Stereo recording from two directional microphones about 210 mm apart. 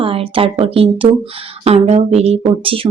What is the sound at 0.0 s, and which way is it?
Speech, 25° right (ahead or behind).